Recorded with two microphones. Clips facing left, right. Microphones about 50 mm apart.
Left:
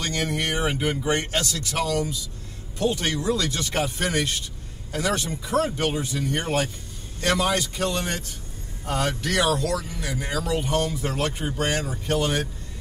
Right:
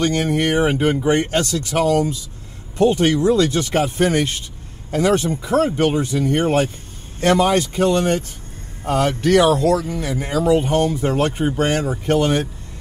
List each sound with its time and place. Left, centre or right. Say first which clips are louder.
0.0 s speech: right 8 dB; right
1.3 s speech: right 7 dB; right
2.0 s speech: right 7 dB; right